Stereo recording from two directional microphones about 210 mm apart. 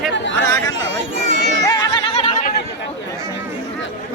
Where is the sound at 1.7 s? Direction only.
20° left (ahead or behind).